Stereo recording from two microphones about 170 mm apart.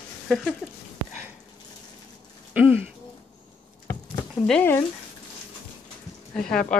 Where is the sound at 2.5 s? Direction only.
10° right (ahead or behind).